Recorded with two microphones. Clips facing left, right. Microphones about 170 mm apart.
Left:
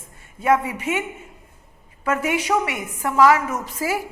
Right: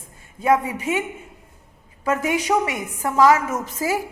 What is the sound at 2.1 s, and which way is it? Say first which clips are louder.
Speech: even; 40° right (ahead or behind).